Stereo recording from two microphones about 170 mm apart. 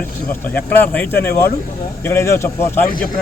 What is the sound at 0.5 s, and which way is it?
Speech, 10° left (ahead or behind).